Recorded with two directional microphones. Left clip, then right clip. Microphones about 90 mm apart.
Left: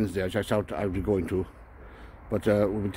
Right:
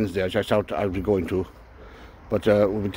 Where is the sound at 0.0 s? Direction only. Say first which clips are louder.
Right 5 dB; 20° left (ahead or behind).